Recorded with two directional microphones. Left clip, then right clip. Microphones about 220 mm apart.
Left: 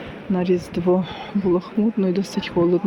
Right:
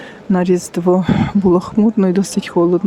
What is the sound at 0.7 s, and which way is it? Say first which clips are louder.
Speech: right 6 dB; 30° right (ahead or behind).